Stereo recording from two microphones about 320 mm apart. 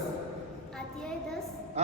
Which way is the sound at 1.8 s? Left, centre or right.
Right.